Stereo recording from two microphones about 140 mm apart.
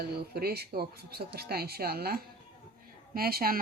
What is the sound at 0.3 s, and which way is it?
Speech, 90° right.